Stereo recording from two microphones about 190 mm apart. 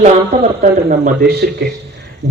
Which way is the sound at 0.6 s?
45° right (ahead or behind).